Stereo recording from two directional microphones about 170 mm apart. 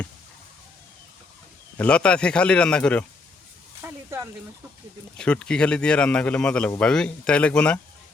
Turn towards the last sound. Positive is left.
turn(degrees=5)  # may be behind; listen again after turning